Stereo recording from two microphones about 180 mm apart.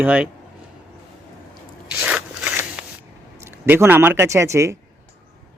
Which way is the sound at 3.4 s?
10° right (ahead or behind).